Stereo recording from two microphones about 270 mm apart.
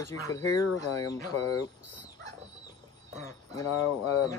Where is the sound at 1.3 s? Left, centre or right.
Left.